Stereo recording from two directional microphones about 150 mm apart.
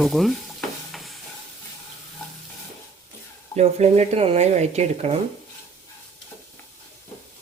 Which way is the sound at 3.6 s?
45° right (ahead or behind).